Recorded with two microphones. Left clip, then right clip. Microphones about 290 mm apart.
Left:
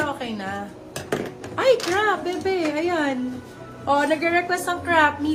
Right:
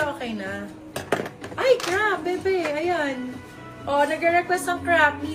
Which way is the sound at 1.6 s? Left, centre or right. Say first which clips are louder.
Left 1 dB; centre.